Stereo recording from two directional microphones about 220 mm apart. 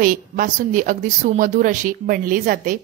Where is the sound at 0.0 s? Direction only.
40° right (ahead or behind).